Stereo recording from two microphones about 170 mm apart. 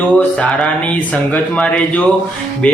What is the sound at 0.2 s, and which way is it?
Speech, 5° left (ahead or behind).